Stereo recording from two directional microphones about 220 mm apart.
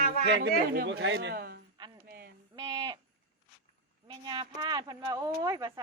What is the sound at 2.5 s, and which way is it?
Sheep, 20° right (ahead or behind).